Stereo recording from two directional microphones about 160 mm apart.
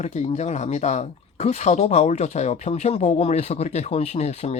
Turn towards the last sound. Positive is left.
turn(degrees=40)  # may be behind; listen again after turning